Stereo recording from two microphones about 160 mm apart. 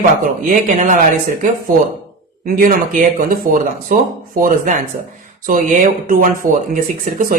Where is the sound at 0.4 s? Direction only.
55° right (ahead or behind).